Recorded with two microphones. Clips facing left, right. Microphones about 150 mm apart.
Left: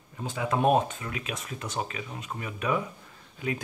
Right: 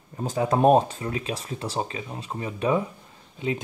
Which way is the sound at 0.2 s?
40° right (ahead or behind).